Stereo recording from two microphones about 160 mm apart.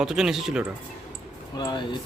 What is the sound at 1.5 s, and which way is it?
Speech, 25° left (ahead or behind).